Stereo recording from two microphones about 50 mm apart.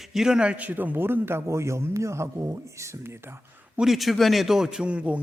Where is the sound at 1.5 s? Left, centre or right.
Right.